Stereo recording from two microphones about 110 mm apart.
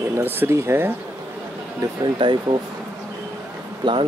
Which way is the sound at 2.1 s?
45° right (ahead or behind).